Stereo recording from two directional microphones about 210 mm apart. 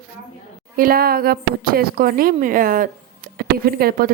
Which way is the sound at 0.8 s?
45° right (ahead or behind).